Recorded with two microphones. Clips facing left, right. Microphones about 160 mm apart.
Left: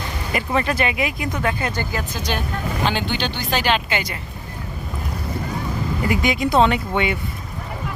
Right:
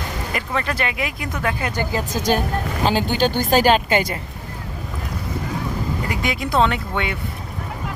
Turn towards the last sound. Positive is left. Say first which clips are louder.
# left 3 dB
turn(degrees=5)  # may be behind; listen again after turning